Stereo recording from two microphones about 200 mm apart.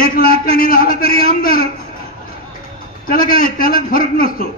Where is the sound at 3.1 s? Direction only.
45° left (ahead or behind).